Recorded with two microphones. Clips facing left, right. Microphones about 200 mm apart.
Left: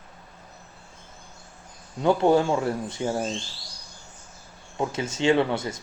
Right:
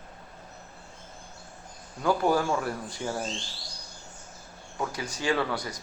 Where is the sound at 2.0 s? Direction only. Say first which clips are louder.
Left 5 dB; 25° left (ahead or behind).